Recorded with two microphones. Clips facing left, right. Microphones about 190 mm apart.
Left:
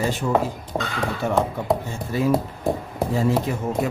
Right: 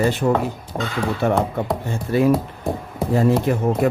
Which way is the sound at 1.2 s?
60° right (ahead or behind).